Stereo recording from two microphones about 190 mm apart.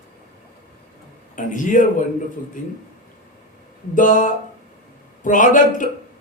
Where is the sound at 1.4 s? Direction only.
45° left (ahead or behind).